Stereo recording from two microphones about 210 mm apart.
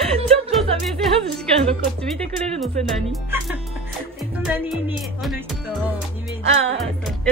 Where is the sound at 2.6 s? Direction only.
Centre (ahead or behind).